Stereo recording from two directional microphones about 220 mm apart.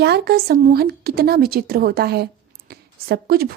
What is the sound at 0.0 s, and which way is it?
A woman's voice, 45° right (ahead or behind).